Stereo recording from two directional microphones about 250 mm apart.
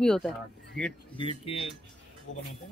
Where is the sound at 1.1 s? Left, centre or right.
Left.